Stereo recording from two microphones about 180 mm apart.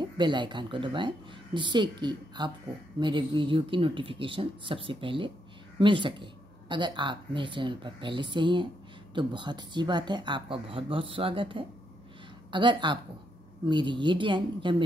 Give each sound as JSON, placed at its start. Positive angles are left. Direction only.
{"t": 0.0, "sound": "speech", "side_deg": -25}